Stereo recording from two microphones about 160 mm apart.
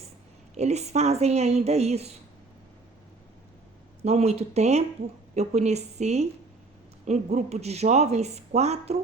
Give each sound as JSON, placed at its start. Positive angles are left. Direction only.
{"t": 0.5, "sound": "speech", "side_deg": -45}
{"t": 4.0, "sound": "speech", "side_deg": -40}